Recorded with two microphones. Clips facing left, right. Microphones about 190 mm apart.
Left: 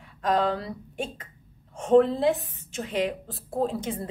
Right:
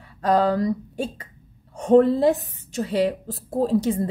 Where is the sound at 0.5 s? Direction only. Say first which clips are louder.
Right 8 dB; 40° right (ahead or behind).